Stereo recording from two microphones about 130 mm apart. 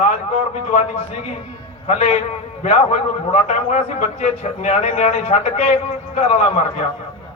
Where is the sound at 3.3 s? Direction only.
55° left (ahead or behind).